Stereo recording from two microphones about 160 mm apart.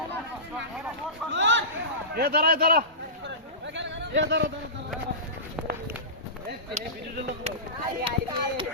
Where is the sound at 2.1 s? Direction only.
80° right.